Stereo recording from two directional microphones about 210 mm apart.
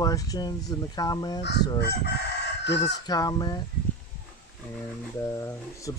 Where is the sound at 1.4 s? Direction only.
55° left (ahead or behind).